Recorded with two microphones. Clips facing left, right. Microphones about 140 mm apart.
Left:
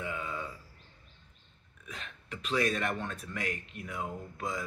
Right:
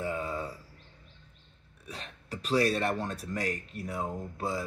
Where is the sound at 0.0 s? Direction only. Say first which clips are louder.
Right 4 dB; 35° right (ahead or behind).